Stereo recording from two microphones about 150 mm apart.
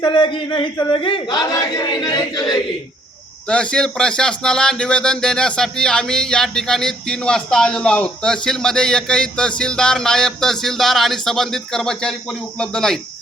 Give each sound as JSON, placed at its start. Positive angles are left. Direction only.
{"t": 0.0, "sound": "speech", "side_deg": 30}
{"t": 3.5, "sound": "speech", "side_deg": 5}